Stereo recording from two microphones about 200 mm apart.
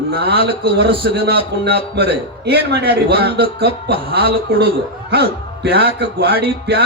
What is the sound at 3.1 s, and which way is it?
A man's voice, 55° right (ahead or behind).